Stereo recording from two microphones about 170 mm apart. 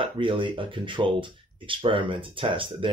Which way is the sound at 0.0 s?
30° right (ahead or behind).